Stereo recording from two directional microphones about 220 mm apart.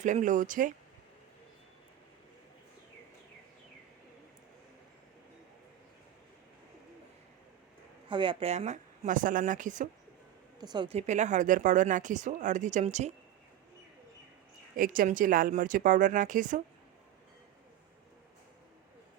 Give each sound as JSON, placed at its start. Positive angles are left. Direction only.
{"t": 0.0, "sound": "speech", "side_deg": -35}
{"t": 8.0, "sound": "speech", "side_deg": -20}
{"t": 10.6, "sound": "speech", "side_deg": -20}
{"t": 14.8, "sound": "speech", "side_deg": -40}